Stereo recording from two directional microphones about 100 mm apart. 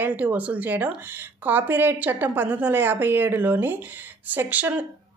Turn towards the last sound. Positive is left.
turn(degrees=-15)  # may be behind; listen again after turning